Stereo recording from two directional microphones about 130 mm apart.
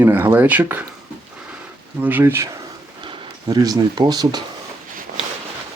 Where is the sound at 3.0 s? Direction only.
30° right (ahead or behind).